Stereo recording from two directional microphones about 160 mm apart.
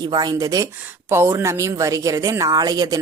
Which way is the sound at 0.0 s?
25° right (ahead or behind).